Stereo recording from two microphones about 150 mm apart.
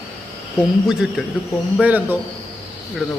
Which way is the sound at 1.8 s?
10° right (ahead or behind).